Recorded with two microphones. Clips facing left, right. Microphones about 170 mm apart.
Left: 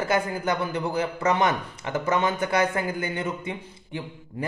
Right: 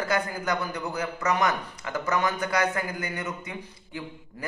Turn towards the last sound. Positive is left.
turn(degrees=25)  # may be behind; listen again after turning